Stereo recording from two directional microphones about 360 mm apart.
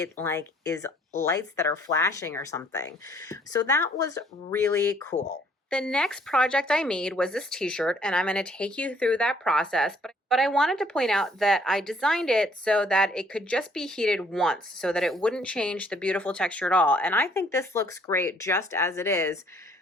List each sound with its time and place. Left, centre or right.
0.2 s speech: centre
5.1 s speech: centre
5.7 s speech: centre